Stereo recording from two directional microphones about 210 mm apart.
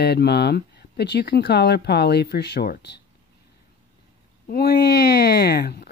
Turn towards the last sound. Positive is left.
turn(degrees=50)  # may be behind; listen again after turning